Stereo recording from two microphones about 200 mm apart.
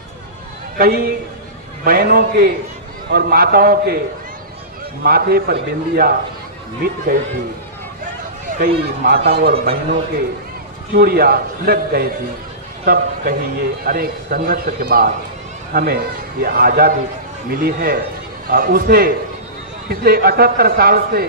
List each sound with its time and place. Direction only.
0.7 s a man's voice: 45° right (ahead or behind)
5.0 s a man's voice: 50° right (ahead or behind)
8.5 s a man's voice: 50° right (ahead or behind)